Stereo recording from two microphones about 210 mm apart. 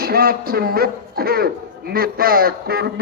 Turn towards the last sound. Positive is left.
turn(degrees=-45)  # may be behind; listen again after turning